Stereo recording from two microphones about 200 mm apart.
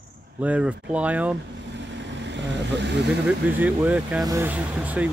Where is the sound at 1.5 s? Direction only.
60° right (ahead or behind).